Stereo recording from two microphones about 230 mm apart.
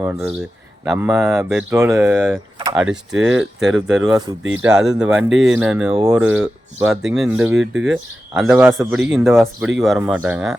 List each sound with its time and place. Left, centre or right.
0.0 s speech: centre